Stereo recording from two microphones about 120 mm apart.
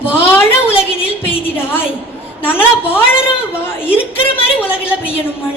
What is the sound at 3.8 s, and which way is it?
A woman's voice, 20° left (ahead or behind).